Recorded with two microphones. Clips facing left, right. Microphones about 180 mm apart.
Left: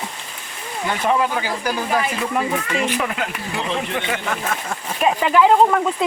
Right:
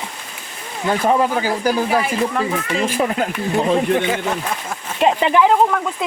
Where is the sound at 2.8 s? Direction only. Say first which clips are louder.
Right 6 dB; 35° right (ahead or behind).